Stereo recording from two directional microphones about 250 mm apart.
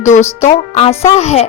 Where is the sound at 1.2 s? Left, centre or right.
Left.